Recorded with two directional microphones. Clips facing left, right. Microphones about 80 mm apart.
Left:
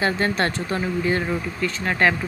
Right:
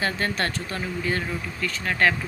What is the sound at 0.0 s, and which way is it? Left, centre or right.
Speech, left.